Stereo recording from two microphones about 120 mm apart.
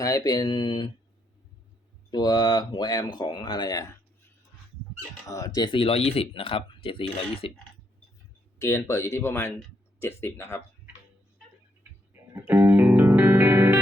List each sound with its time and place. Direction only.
0.0 s speech: 30° left (ahead or behind)
2.0 s speech: 35° left (ahead or behind)
5.3 s speech: 30° left (ahead or behind); by 7.5 s 50° left (ahead or behind)
8.5 s speech: 25° left (ahead or behind)
12.3 s music: 15° right (ahead or behind)